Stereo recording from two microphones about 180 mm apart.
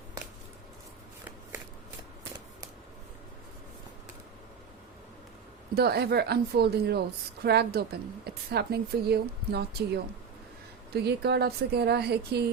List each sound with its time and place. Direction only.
5.7 s a woman's voice: 60° right (ahead or behind)